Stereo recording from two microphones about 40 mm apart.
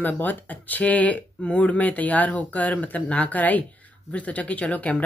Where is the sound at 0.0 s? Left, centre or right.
Left.